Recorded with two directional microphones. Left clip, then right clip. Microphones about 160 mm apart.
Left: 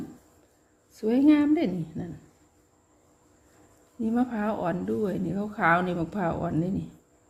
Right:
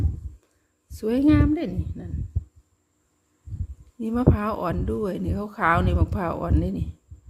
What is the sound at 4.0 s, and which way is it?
Speech, 25° right (ahead or behind).